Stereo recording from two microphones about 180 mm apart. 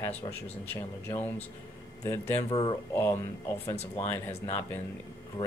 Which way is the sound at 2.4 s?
25° left (ahead or behind).